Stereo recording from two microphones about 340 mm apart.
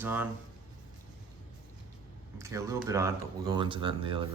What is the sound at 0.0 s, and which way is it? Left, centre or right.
Speech, centre.